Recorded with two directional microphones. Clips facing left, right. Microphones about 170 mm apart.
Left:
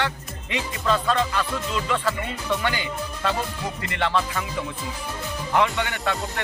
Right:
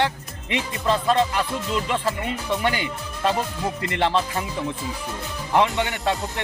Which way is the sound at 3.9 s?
25° right (ahead or behind).